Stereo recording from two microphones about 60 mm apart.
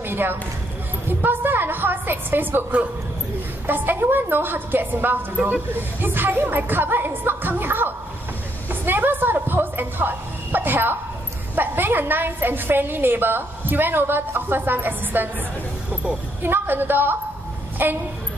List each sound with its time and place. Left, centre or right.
0.0 s a sound: right
1.0 s a woman's voice: right
3.6 s a woman's voice: right
8.6 s a sound: right
11.5 s a woman's voice: right
15.9 s vehicle: centre
16.4 s a woman's voice: right